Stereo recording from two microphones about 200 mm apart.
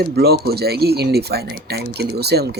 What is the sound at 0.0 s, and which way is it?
Speech, 50° right (ahead or behind).